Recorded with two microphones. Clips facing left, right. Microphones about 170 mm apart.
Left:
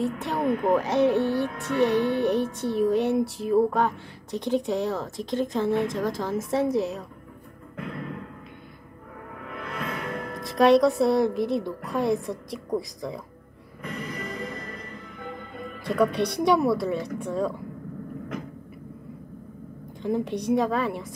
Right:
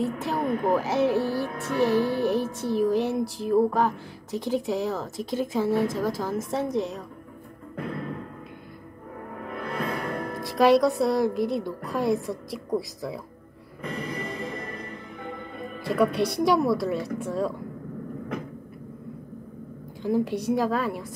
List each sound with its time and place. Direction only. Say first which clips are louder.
0.0 s music: left 1 dB; centre (ahead or behind)
9.5 s music: right 3 dB; 35° right (ahead or behind)
10.4 s music: left 1 dB; centre (ahead or behind)
13.9 s music: right 1 dB; 30° right (ahead or behind)
15.8 s music: even; centre (ahead or behind)
20.0 s music: right 2 dB; centre (ahead or behind)